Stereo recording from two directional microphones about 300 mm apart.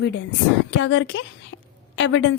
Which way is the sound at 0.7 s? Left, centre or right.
Left.